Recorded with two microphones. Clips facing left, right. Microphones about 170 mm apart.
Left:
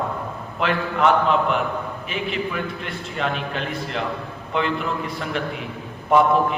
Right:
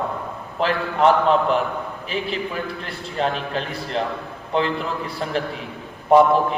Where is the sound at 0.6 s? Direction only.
35° right (ahead or behind).